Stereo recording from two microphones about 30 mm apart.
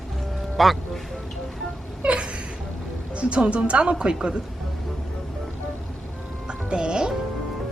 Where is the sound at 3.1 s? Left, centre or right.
Right.